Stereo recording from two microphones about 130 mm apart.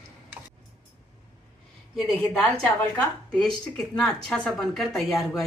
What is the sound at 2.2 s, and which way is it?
A woman's voice, 10° left (ahead or behind).